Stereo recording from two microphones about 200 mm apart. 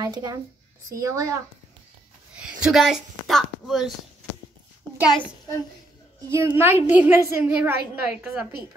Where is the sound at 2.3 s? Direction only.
5° right (ahead or behind).